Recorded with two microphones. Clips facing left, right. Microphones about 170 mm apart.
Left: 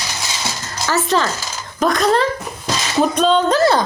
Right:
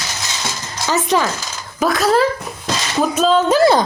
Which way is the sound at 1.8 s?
5° right (ahead or behind).